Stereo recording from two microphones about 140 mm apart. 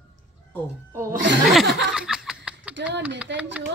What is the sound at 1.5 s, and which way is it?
Speech, centre (ahead or behind).